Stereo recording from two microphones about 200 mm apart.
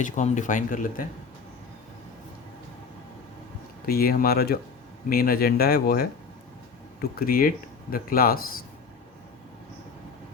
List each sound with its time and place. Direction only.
0.0 s speech: 35° left (ahead or behind)
3.8 s speech: 50° left (ahead or behind)